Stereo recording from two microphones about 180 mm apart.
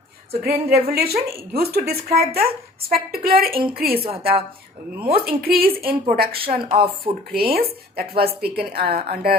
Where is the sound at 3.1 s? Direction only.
55° right (ahead or behind).